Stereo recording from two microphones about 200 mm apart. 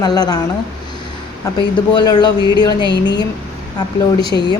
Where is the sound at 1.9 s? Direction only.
20° left (ahead or behind).